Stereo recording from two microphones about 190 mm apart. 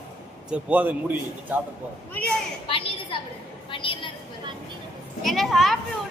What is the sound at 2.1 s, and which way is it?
Speech, 5° left (ahead or behind).